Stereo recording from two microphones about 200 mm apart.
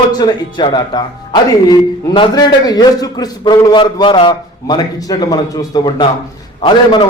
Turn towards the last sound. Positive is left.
turn(degrees=25)  # may be behind; listen again after turning